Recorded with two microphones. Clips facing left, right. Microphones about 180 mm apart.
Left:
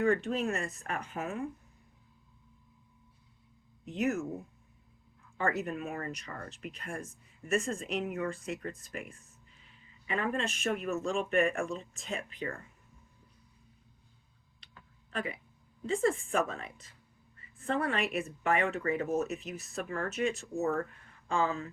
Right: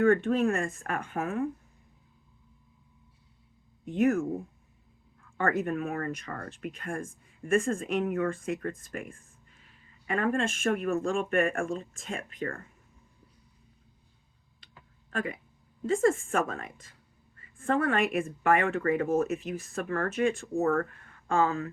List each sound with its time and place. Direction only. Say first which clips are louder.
0.0 s speech: right 6 dB; 55° right (ahead or behind)
3.8 s speech: right 6 dB; 55° right (ahead or behind)
5.4 s speech: right 4 dB; 55° right (ahead or behind)
15.1 s speech: right 4 dB; 45° right (ahead or behind)